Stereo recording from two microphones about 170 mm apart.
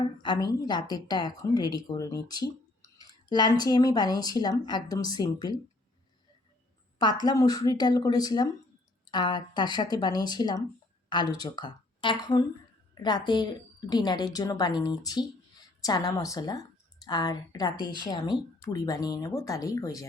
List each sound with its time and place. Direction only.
0.2 s speech: 25° left (ahead or behind)
7.3 s speech: 20° left (ahead or behind)